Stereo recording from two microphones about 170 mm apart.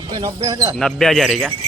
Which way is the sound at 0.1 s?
25° right (ahead or behind).